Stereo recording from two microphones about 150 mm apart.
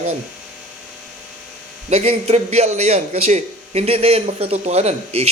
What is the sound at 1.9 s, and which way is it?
Speech, 45° right (ahead or behind).